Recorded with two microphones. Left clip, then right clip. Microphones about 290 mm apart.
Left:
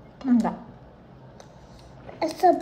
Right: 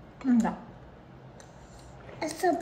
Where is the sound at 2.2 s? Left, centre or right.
Left.